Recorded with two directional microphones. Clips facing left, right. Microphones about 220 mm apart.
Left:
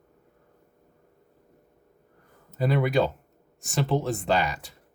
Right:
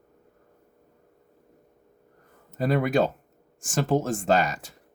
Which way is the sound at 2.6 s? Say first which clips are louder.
Right 1 dB; 45° right (ahead or behind).